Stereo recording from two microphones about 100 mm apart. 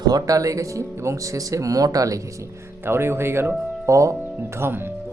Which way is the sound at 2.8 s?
25° right (ahead or behind).